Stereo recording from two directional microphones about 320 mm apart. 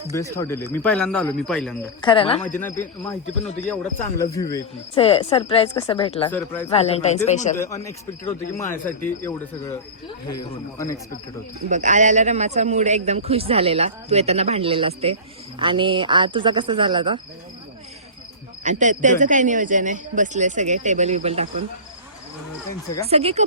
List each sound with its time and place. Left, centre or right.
0.3 s speech: centre
2.0 s a man's voice: centre
3.7 s speech: centre
6.3 s speech: centre
6.7 s a man's voice: centre
7.5 s speech: centre
11.7 s a man's voice: right
18.6 s speech: right
23.0 s speech: centre